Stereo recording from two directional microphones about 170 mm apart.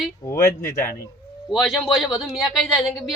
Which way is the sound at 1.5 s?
Centre (ahead or behind).